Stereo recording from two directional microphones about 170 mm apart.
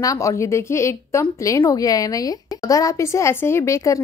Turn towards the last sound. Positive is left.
turn(degrees=20)  # may be behind; listen again after turning